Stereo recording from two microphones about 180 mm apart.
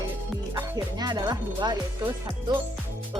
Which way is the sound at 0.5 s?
25° right (ahead or behind).